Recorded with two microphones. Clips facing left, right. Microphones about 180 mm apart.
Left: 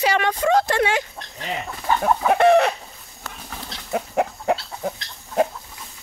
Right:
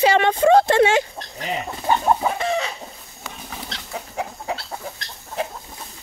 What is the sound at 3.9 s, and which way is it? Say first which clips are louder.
Chicken: left 8 dB; 65° left (ahead or behind).